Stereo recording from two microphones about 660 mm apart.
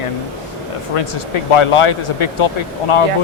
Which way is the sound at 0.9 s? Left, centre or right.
Left.